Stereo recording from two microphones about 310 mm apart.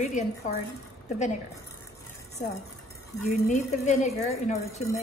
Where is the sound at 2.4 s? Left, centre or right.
Left.